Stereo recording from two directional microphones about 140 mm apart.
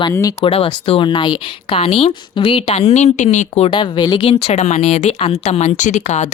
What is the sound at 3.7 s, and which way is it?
Speech, 35° left (ahead or behind).